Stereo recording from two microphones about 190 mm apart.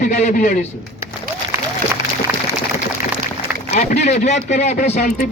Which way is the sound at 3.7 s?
40° left (ahead or behind).